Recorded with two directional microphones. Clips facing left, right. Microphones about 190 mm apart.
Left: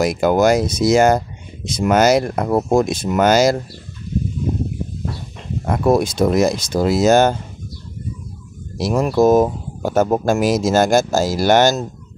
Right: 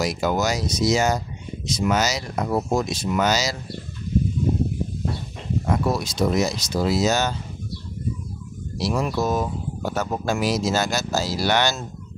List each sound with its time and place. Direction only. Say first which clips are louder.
0.0 s speech: left 8 dB; 55° left (ahead or behind)
5.7 s speech: left 9 dB; 50° left (ahead or behind)
8.7 s speech: left 7 dB; 50° left (ahead or behind)